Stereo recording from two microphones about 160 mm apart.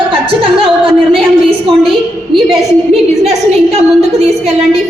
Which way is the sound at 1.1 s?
35° right (ahead or behind).